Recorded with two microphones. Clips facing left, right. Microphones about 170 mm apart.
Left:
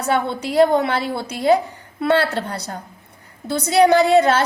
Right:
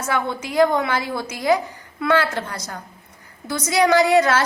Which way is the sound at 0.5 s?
35° left (ahead or behind).